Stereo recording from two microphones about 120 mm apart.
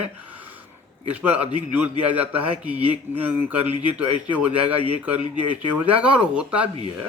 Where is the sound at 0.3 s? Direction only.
15° right (ahead or behind).